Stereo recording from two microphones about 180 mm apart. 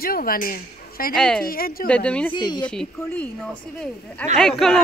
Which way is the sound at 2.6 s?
5° left (ahead or behind).